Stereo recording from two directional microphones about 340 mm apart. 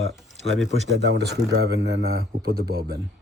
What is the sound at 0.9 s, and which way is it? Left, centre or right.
Speech, right.